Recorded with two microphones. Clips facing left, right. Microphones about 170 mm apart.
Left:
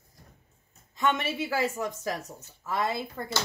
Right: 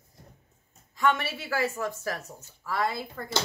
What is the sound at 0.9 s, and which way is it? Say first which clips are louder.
Speech: right 1 dB; 20° left (ahead or behind).